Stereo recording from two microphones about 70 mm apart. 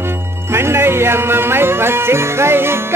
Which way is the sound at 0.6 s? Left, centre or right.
Right.